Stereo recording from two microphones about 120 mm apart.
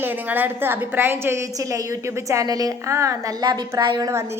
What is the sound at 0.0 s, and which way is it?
A woman's voice, 15° right (ahead or behind).